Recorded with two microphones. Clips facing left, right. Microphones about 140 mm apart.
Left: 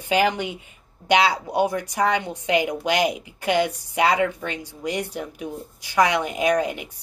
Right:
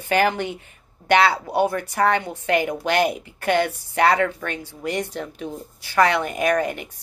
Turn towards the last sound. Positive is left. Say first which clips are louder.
# even
turn(degrees=15)  # may be behind; listen again after turning